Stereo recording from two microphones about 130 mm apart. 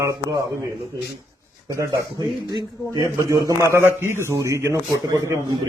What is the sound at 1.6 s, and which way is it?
A man's voice, 30° right (ahead or behind).